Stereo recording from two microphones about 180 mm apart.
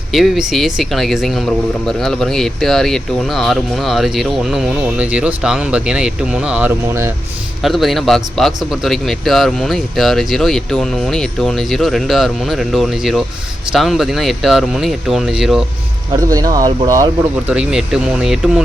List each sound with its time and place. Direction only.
0.1 s a man's voice: centre (ahead or behind)
7.6 s a man's voice: centre (ahead or behind)
16.3 s speech: 20° right (ahead or behind)
17.5 s a man's voice: 5° right (ahead or behind)